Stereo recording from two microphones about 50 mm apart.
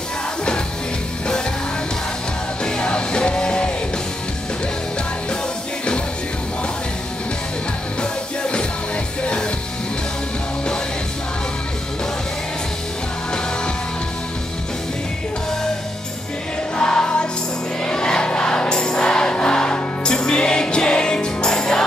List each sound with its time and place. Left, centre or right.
2.6 s music: left
8.0 s music: centre
16.7 s music: centre